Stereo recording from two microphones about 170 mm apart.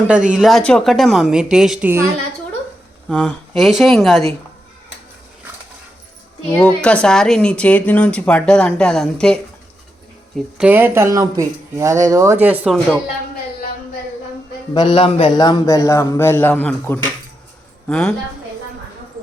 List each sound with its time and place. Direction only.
0.3 s speech: centre (ahead or behind)
1.9 s speech: 15° right (ahead or behind)
3.1 s speech: centre (ahead or behind)
6.6 s speech: 5° left (ahead or behind)
10.3 s speech: 5° right (ahead or behind)
14.7 s a woman's voice: 25° left (ahead or behind); by 18.1 s 5° left (ahead or behind)